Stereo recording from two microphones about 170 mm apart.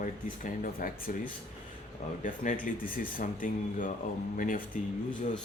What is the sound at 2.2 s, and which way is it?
Speech, 50° left (ahead or behind).